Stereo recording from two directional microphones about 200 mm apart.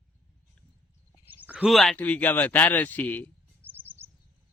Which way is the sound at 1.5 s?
Centre (ahead or behind).